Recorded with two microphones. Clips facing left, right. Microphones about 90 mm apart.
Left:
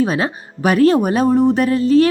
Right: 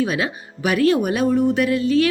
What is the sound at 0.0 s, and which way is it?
A woman's voice, 35° left (ahead or behind).